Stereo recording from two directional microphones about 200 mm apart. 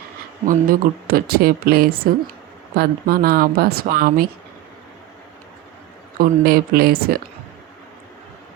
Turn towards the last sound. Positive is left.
turn(degrees=-50)  # may be behind; listen again after turning